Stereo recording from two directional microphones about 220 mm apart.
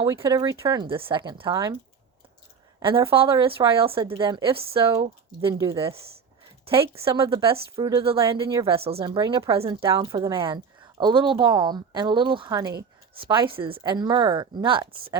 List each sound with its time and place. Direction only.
0.0 s a woman's voice: 15° right (ahead or behind)
2.8 s a woman's voice: 25° right (ahead or behind)
8.3 s speech: 15° right (ahead or behind)
8.6 s a woman's voice: 25° right (ahead or behind)